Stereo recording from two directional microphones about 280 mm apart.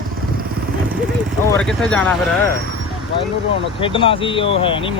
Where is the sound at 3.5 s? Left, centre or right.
Centre.